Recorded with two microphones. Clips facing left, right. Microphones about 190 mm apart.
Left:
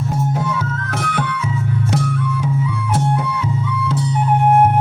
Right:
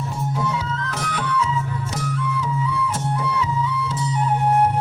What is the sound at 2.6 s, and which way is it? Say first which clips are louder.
Music: left 4 dB; 55° left (ahead or behind).